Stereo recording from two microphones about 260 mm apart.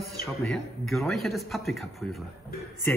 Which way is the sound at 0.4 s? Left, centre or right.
Centre.